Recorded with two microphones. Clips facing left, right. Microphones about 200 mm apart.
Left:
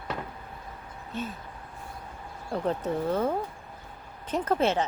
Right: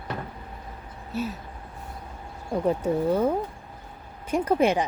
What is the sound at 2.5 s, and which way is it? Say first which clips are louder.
Speech: right 5 dB; 10° right (ahead or behind).